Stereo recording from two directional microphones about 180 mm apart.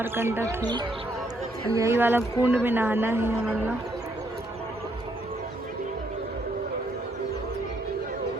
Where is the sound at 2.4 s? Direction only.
10° right (ahead or behind).